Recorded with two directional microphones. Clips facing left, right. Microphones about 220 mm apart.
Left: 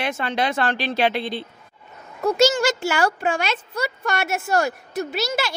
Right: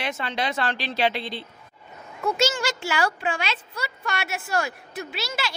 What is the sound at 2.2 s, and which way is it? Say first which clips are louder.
Speech: left 6 dB; 40° left (ahead or behind).